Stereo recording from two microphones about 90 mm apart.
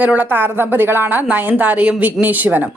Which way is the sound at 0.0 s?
15° right (ahead or behind).